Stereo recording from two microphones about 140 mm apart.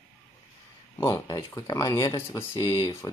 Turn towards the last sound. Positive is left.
turn(degrees=25)  # may be behind; listen again after turning